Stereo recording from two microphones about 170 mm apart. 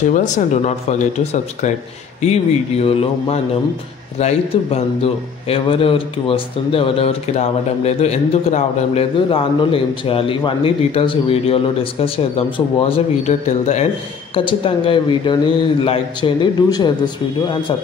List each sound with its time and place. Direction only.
0.3 s a man's voice: 45° left (ahead or behind)
14.3 s a man's voice: 30° left (ahead or behind)